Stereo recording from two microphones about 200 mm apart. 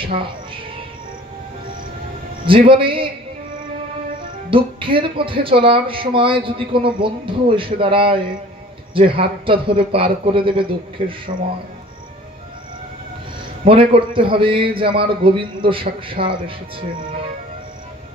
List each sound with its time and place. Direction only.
0.0 s speech: 25° right (ahead or behind)
2.4 s speech: 25° right (ahead or behind)
4.5 s speech: 25° right (ahead or behind)
13.7 s speech: 25° right (ahead or behind)